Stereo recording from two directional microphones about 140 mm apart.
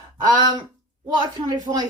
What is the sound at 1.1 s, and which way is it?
Speech, 30° right (ahead or behind).